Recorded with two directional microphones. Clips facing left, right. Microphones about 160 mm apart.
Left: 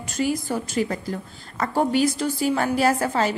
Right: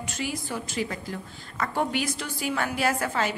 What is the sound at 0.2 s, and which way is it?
A woman's voice, 45° left (ahead or behind).